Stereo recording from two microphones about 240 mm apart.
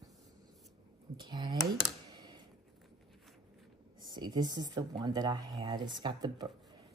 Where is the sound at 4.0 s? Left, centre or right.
Centre.